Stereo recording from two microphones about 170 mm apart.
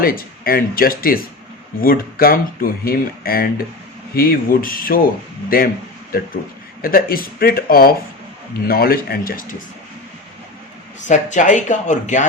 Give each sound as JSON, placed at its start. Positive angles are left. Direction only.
{"t": 0.0, "sound": "speech", "side_deg": 60}
{"t": 5.5, "sound": "a sound", "side_deg": 60}
{"t": 6.8, "sound": "speech", "side_deg": 60}
{"t": 11.1, "sound": "speech", "side_deg": 45}